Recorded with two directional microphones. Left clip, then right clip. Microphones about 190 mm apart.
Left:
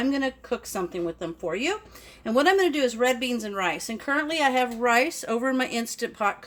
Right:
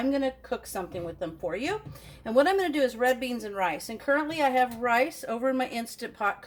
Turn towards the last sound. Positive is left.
turn(degrees=45)  # may be behind; listen again after turning